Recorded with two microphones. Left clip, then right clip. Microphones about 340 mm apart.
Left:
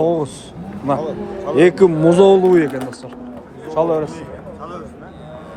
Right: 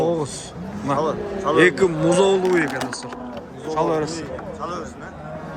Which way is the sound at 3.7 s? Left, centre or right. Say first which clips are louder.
Left 4 dB; centre.